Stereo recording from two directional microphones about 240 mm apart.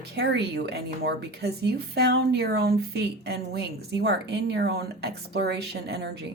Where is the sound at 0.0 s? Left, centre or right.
Right.